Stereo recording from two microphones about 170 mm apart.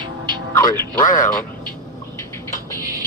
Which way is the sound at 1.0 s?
50° left (ahead or behind).